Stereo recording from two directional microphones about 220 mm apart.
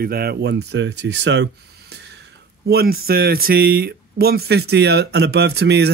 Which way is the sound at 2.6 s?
45° right (ahead or behind).